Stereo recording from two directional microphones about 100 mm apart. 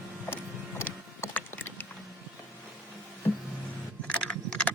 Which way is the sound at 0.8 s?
20° left (ahead or behind).